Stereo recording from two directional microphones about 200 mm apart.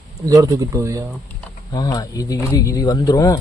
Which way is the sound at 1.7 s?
20° left (ahead or behind).